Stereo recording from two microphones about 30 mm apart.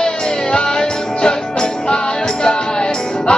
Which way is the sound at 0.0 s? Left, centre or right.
Left.